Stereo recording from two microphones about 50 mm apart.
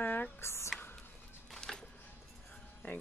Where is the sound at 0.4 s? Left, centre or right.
Left.